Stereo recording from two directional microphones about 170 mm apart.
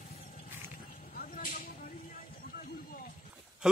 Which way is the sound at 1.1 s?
55° left (ahead or behind).